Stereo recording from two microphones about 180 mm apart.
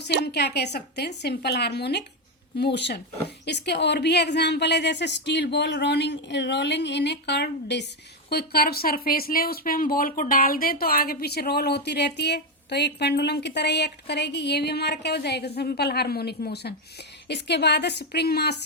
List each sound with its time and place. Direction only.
0.0 s speech: 70° left (ahead or behind)